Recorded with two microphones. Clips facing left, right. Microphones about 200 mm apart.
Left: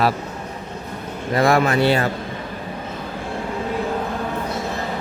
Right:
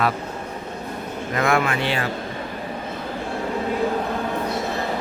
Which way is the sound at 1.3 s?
35° left (ahead or behind).